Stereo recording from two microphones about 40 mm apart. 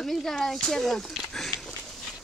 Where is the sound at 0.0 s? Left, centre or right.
Centre.